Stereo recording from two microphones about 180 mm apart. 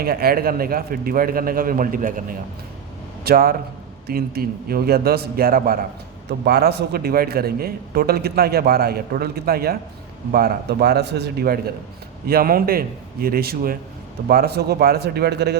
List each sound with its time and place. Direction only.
0.0 s a man's voice: 55° right (ahead or behind)
3.2 s a man's voice: 55° right (ahead or behind)